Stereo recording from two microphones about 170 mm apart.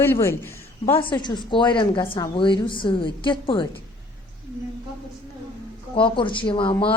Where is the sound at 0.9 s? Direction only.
30° left (ahead or behind).